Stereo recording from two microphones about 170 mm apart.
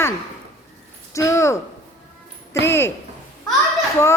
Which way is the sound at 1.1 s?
20° left (ahead or behind).